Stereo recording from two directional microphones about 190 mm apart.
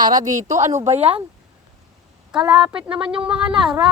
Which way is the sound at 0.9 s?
35° right (ahead or behind).